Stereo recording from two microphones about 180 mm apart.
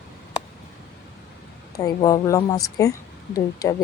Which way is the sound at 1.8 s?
20° left (ahead or behind).